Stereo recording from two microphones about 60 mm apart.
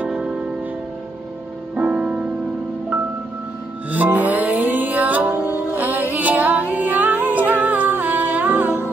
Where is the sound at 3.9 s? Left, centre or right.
Right.